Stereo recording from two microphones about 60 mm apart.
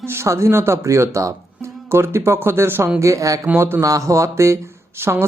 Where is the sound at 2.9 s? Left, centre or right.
Right.